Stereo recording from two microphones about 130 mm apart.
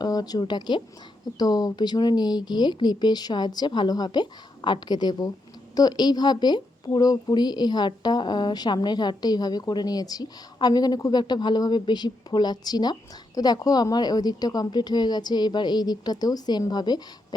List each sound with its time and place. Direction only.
0.0 s speech: 30° left (ahead or behind)